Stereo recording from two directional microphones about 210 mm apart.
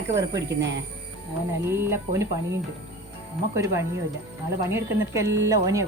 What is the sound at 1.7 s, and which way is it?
Speech, 10° right (ahead or behind).